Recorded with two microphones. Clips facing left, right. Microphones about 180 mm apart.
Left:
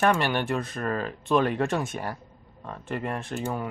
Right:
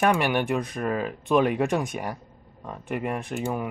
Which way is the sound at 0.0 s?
15° right (ahead or behind).